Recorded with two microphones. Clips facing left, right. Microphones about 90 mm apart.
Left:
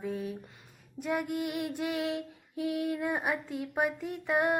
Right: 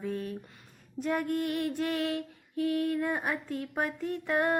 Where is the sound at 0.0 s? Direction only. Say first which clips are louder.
Even; 10° left (ahead or behind).